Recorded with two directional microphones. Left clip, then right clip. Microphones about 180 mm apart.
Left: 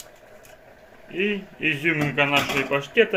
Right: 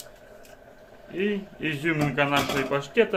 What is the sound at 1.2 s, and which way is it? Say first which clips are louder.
Speech: left 3 dB; centre (ahead or behind).